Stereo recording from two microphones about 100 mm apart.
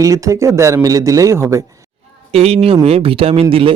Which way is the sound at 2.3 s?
90° right.